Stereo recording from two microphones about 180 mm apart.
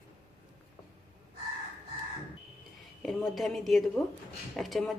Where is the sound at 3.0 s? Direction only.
Centre (ahead or behind).